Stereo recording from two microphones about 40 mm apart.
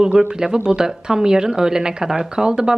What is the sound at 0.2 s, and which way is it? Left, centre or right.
Speech, centre.